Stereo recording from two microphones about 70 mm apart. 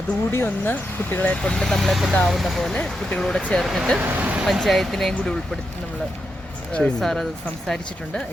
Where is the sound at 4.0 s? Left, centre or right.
Right.